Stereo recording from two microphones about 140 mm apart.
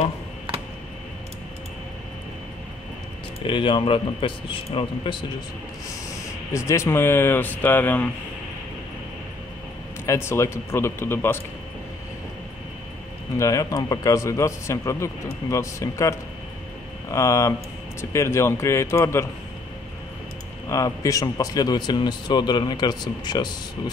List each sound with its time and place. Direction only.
3.4 s a man's voice: 40° left (ahead or behind)
6.5 s speech: 20° left (ahead or behind)
10.0 s speech: 20° left (ahead or behind)
13.4 s speech: 25° left (ahead or behind)
20.6 s speech: 25° left (ahead or behind)